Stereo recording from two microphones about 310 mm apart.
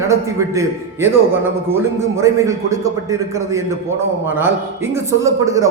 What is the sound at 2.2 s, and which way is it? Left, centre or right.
A man's voice, centre.